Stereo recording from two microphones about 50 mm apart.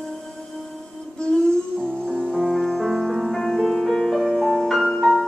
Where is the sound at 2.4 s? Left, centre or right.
Centre.